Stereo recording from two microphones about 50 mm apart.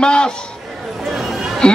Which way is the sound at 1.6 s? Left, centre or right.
Centre.